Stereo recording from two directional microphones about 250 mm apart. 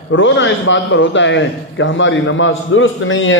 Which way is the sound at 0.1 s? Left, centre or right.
Left.